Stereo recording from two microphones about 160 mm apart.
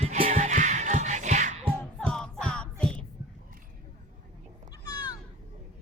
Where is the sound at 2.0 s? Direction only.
5° left (ahead or behind).